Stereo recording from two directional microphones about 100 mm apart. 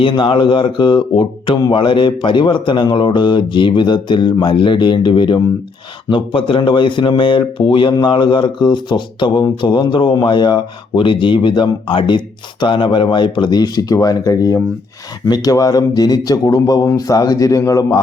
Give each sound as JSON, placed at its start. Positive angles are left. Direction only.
{"t": 0.0, "sound": "speech", "side_deg": 55}